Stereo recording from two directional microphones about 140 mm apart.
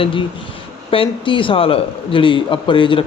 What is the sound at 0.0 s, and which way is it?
A man's voice, 40° left (ahead or behind).